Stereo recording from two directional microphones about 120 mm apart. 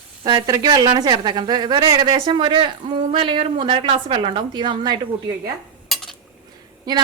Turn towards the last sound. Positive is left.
turn(degrees=-35)  # may be behind; listen again after turning